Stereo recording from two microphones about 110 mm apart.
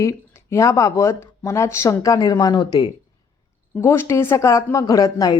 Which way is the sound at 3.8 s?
25° left (ahead or behind).